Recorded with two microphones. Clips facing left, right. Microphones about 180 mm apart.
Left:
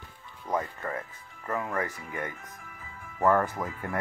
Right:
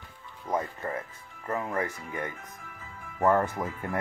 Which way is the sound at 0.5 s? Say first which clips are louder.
Even; 25° right (ahead or behind).